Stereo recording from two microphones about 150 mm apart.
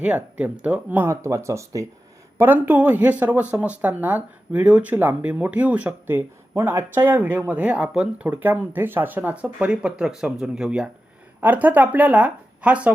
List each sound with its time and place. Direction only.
0.0 s speech: 10° right (ahead or behind)